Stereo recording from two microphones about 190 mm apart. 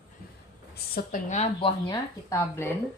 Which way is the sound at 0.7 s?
50° left (ahead or behind).